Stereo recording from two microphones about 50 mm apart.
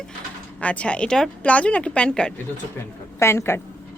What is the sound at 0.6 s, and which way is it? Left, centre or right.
Speech, left.